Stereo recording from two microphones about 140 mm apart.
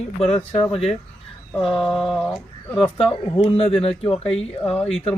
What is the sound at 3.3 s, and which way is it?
Speech, 45° left (ahead or behind).